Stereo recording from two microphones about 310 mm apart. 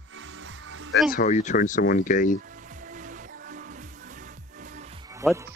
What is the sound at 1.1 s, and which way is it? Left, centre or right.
Speech, left.